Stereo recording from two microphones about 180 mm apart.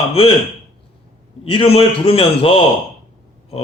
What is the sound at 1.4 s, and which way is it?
A man's voice, 30° left (ahead or behind).